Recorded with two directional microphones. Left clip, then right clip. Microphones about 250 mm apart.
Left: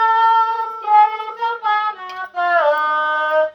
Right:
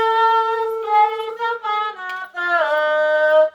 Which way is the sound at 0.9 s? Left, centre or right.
Right.